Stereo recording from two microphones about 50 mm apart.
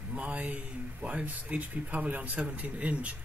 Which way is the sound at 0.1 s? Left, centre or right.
Right.